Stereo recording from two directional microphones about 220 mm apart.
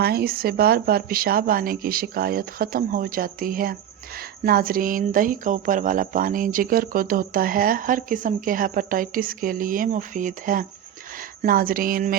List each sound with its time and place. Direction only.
0.0 s a woman's voice: 45° right (ahead or behind)